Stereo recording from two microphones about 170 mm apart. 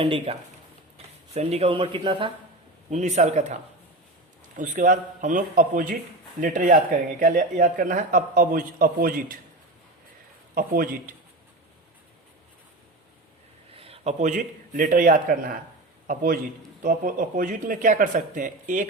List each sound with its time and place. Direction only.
0.0 s speech: 30° right (ahead or behind)
2.9 s speech: 45° right (ahead or behind)
10.5 s a man's voice: 60° right (ahead or behind)
13.7 s a man's voice: 35° right (ahead or behind); by 18.9 s 50° right (ahead or behind)